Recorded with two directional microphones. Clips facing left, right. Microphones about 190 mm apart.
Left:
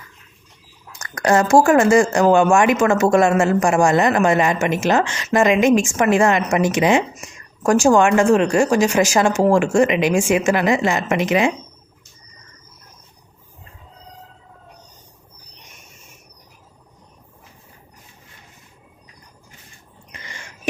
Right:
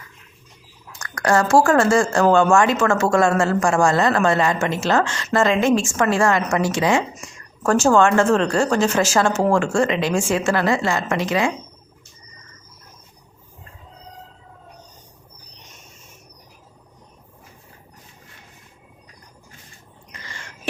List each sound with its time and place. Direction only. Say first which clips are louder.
0.9 s a woman's voice: left 2 dB; 20° left (ahead or behind)